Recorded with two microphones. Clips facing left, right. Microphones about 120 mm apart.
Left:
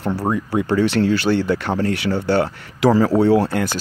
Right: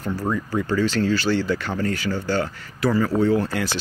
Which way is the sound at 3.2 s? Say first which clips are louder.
Left 5 dB; 70° left (ahead or behind).